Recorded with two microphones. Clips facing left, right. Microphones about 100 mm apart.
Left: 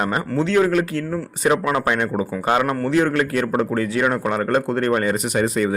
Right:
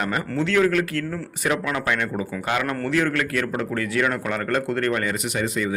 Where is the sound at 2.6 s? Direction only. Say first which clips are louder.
Left 4 dB; 20° left (ahead or behind).